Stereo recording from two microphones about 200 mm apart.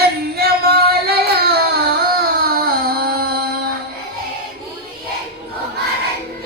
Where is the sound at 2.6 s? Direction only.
50° right (ahead or behind).